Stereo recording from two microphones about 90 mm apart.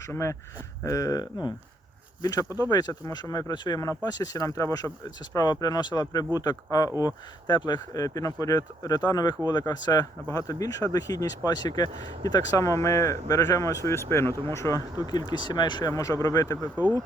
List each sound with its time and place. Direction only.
0.1 s speech: 35° left (ahead or behind); by 1.5 s 50° left (ahead or behind)
2.2 s speech: 40° left (ahead or behind)
3.5 s speech: 55° left (ahead or behind)
3.8 s speech: 40° left (ahead or behind)
7.0 s speech: 55° left (ahead or behind); by 14.8 s 35° left (ahead or behind)
15.3 s speech: 55° left (ahead or behind)
15.9 s speech: 40° left (ahead or behind)